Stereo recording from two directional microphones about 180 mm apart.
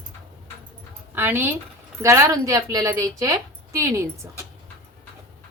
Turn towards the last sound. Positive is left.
turn(degrees=-15)  # may be behind; listen again after turning